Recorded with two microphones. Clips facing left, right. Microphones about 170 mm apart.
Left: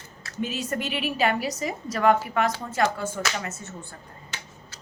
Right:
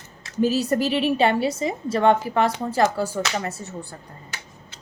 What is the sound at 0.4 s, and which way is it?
A woman's voice, 35° right (ahead or behind).